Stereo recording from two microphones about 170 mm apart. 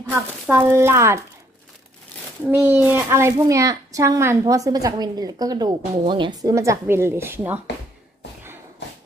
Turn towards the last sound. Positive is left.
turn(degrees=-10)  # may be behind; listen again after turning